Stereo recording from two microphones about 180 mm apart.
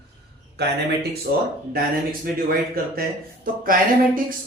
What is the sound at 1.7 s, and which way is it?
Speech, 55° right (ahead or behind).